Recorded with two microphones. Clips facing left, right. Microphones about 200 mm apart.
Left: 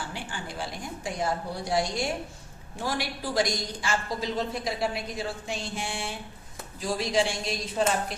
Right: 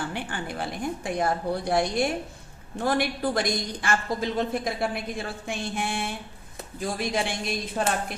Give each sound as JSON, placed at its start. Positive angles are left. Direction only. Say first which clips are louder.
{"t": 0.1, "sound": "a woman's voice", "louder": "right 5 dB", "side_deg": -60}